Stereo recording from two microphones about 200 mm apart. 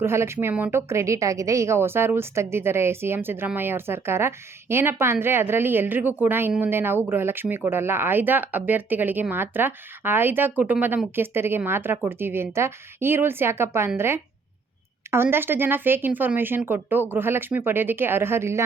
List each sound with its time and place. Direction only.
0.0 s a woman's voice: 10° right (ahead or behind)